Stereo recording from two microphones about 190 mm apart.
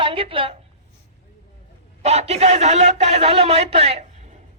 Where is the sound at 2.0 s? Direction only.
35° right (ahead or behind).